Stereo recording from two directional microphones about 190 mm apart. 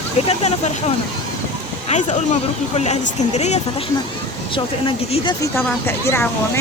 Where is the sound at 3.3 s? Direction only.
35° left (ahead or behind).